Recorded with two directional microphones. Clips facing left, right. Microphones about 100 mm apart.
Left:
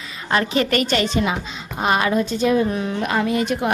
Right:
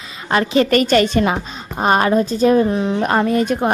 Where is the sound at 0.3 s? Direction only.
30° right (ahead or behind); by 1.4 s 55° right (ahead or behind).